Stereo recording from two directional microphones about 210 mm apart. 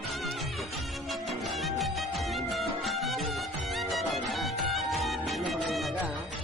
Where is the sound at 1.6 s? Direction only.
Centre (ahead or behind).